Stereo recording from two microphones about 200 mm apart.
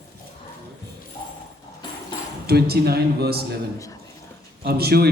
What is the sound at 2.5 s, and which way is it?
Speech, 50° right (ahead or behind).